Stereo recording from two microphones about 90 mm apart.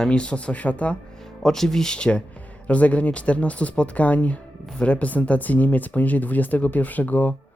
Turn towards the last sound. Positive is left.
turn(degrees=20)  # may be behind; listen again after turning